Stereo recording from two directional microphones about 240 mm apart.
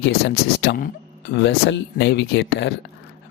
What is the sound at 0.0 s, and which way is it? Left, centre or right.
Speech, left.